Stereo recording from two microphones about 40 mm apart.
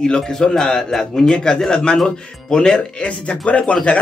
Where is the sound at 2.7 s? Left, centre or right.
Left.